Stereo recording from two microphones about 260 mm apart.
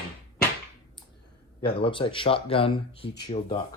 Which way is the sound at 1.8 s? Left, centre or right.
Centre.